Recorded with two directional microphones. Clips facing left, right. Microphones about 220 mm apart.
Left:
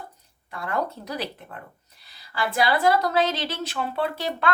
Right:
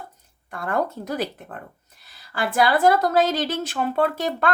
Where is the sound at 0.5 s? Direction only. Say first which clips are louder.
Right 3 dB; 50° right (ahead or behind).